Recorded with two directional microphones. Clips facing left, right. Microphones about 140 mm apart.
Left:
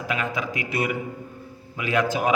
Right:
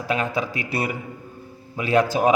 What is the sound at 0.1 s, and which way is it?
A man's voice, 35° right (ahead or behind).